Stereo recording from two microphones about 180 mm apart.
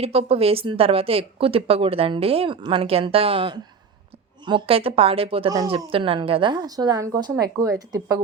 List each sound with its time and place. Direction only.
0.0 s speech: 35° right (ahead or behind)
5.5 s a woman's voice: 20° right (ahead or behind)
5.7 s a woman's voice: 30° right (ahead or behind)